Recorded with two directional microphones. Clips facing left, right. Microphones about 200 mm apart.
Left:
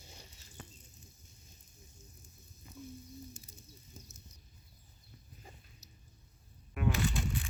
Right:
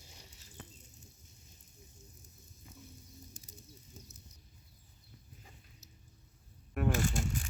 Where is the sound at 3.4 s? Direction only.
40° right (ahead or behind).